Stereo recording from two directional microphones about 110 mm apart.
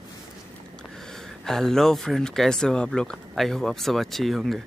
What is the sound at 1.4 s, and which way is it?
Speech, 5° left (ahead or behind).